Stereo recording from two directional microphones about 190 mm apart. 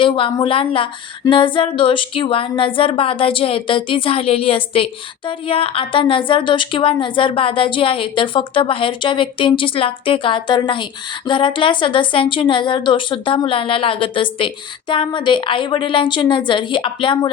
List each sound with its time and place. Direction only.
0.0 s music: 25° left (ahead or behind)